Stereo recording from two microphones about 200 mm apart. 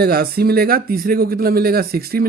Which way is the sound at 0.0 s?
50° right (ahead or behind).